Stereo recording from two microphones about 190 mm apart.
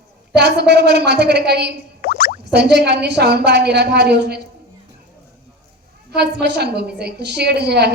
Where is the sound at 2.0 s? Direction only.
50° left (ahead or behind).